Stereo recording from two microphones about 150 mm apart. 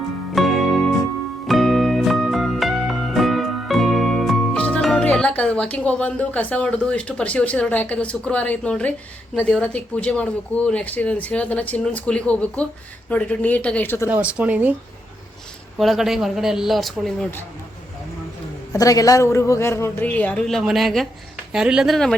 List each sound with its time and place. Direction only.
0.3 s music: centre (ahead or behind)
9.3 s speech: 5° left (ahead or behind)
14.1 s speech: 10° right (ahead or behind)
15.8 s speech: centre (ahead or behind)
18.7 s speech: 20° left (ahead or behind); by 22.1 s centre (ahead or behind)